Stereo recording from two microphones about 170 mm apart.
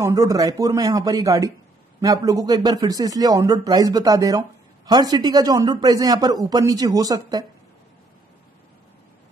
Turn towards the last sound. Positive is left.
turn(degrees=-20)  # may be behind; listen again after turning